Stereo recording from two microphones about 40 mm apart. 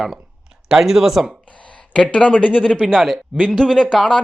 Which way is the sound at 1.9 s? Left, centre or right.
Left.